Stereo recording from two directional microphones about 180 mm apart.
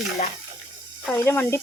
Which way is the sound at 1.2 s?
15° left (ahead or behind).